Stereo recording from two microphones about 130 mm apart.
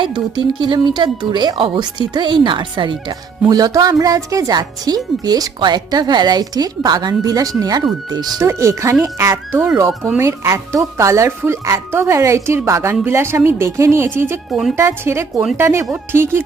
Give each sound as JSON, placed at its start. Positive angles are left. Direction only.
{"t": 0.0, "sound": "a woman's voice", "side_deg": -35}